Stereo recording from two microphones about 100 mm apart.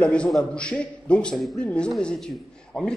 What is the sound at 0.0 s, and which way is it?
A man's voice, 10° left (ahead or behind).